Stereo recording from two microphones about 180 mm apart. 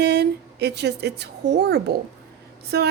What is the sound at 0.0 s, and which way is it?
Speech, 65° right (ahead or behind).